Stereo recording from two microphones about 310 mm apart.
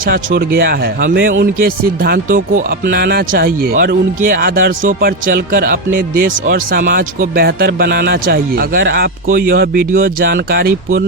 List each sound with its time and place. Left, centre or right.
0.0 s speech: right
5.9 s speech: right
6.2 s speech: right